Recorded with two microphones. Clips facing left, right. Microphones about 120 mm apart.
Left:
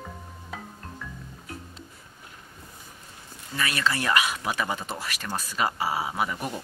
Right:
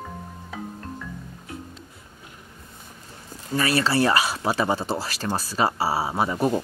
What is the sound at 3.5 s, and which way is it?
Speech, 35° right (ahead or behind).